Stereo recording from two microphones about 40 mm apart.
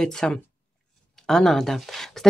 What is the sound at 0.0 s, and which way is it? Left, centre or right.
Speech, centre.